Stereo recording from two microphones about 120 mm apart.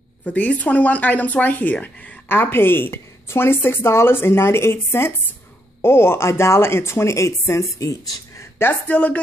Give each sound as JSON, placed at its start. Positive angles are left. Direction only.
{"t": 0.2, "sound": "speech", "side_deg": 10}